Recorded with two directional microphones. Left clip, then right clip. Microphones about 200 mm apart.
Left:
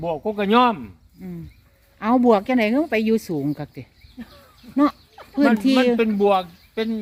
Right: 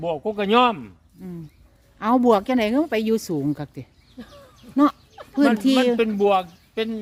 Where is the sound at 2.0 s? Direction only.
5° right (ahead or behind).